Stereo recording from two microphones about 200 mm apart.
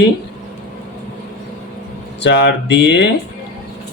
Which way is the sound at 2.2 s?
60° left (ahead or behind).